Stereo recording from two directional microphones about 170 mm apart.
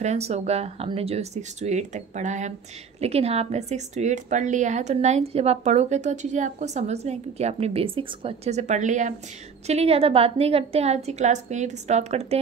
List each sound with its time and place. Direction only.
0.0 s a woman's voice: 40° right (ahead or behind)